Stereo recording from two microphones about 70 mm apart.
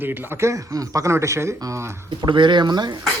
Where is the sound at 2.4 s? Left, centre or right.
Right.